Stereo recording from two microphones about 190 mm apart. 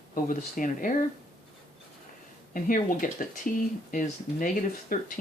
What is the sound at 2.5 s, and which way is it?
Speech, 45° left (ahead or behind).